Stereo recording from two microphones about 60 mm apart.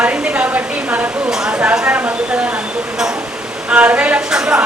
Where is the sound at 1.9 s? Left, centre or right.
Right.